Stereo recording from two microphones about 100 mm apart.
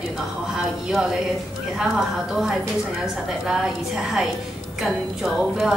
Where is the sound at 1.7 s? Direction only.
5° right (ahead or behind).